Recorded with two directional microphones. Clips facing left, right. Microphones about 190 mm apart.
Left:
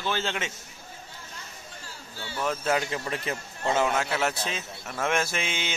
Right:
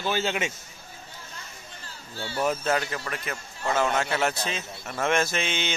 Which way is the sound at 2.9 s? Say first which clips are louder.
Left 2 dB; 25° left (ahead or behind).